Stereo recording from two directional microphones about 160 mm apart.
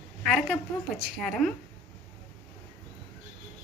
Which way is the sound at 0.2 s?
Centre (ahead or behind).